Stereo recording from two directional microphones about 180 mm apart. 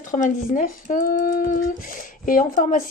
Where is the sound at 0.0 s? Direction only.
45° left (ahead or behind).